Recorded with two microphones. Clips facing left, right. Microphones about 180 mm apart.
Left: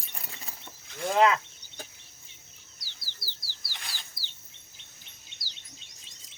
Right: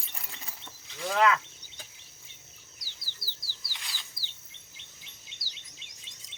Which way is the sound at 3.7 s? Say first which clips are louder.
Left 2 dB; 50° left (ahead or behind).